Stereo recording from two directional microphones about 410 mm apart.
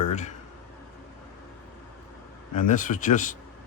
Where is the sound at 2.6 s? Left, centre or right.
Centre.